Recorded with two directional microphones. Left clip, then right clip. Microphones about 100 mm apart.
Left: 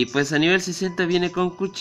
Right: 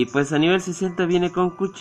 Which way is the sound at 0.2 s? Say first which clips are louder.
Even; 5° left (ahead or behind).